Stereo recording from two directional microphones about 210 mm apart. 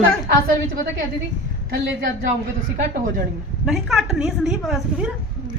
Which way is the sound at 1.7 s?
45° right (ahead or behind).